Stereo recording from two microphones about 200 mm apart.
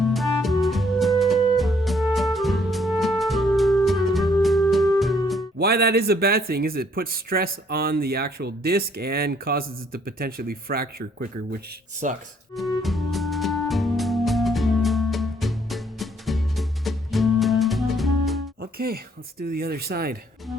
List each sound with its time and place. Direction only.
0.0 s music: centre (ahead or behind)
5.5 s speech: 50° right (ahead or behind)
12.5 s music: centre (ahead or behind)
18.6 s speech: 50° right (ahead or behind)